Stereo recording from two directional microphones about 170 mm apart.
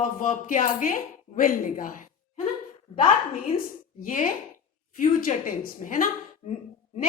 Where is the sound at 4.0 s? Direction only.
50° left (ahead or behind).